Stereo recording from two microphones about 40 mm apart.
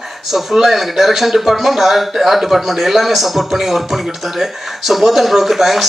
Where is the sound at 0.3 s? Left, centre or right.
Centre.